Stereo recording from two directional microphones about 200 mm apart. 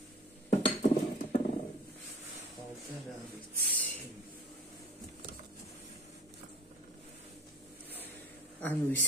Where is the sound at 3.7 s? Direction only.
10° left (ahead or behind).